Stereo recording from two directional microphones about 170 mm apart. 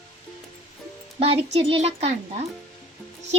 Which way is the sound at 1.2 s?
35° right (ahead or behind).